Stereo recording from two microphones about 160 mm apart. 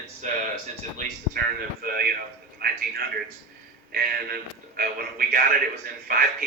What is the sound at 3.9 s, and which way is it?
Speech, 70° right (ahead or behind).